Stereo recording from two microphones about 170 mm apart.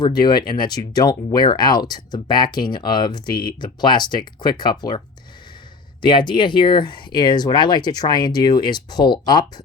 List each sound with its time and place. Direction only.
0.0 s speech: 25° left (ahead or behind)